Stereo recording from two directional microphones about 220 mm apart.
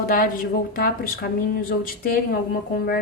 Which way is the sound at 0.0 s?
40° left (ahead or behind).